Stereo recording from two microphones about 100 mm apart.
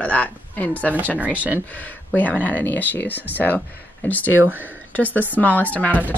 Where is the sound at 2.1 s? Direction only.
15° left (ahead or behind).